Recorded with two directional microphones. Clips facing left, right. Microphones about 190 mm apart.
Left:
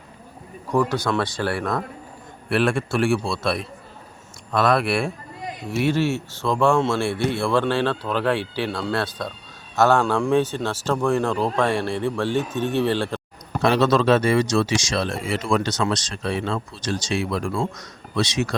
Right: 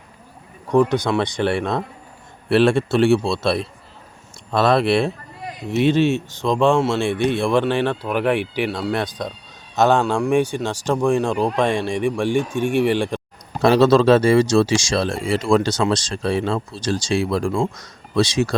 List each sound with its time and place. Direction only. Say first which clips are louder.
0.7 s a man's voice: right 4 dB; 20° right (ahead or behind)
13.6 s speech: right 5 dB; 35° right (ahead or behind)